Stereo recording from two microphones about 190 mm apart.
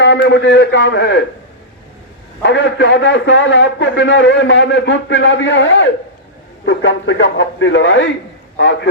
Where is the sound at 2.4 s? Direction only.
70° left (ahead or behind).